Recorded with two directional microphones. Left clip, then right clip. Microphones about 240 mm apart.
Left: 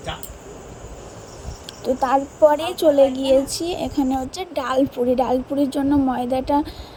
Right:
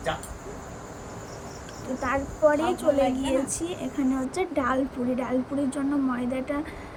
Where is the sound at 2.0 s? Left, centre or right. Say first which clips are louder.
Left 7 dB; left.